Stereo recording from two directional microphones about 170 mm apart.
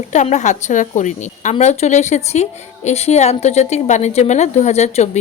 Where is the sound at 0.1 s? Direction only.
45° left (ahead or behind).